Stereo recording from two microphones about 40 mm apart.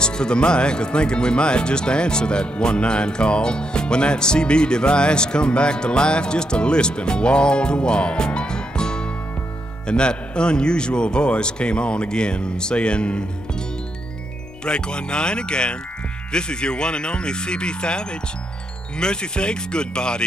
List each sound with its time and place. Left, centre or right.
0.0 s speech: left